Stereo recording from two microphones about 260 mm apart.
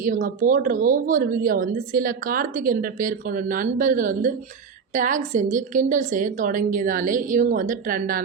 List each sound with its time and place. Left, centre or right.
0.0 s a woman's voice: right